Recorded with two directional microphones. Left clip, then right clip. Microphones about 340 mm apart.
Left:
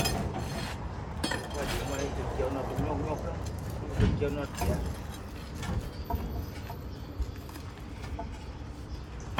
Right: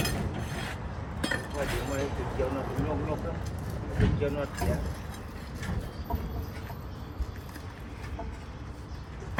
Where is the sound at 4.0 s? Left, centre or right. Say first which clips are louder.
Right 2 dB; centre.